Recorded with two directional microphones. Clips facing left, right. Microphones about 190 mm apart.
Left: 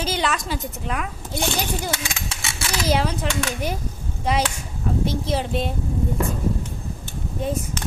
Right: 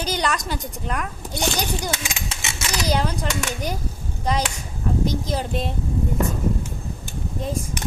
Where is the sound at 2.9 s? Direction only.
5° left (ahead or behind).